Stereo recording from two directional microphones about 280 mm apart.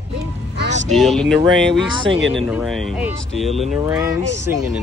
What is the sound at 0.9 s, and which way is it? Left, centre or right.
Speech, centre.